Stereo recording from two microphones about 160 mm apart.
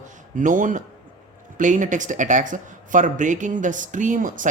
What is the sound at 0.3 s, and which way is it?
Speech, 55° right (ahead or behind).